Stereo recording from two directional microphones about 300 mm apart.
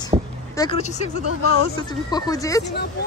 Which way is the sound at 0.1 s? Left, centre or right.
Centre.